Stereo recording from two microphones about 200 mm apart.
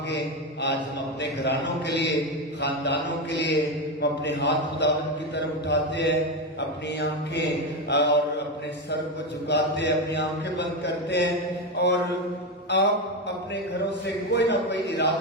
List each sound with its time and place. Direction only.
0.1 s a sound: 60° left (ahead or behind)
1.2 s mantra: 60° left (ahead or behind)
7.9 s mantra: 60° left (ahead or behind)
9.5 s mantra: 60° left (ahead or behind)
14.3 s mantra: 60° left (ahead or behind)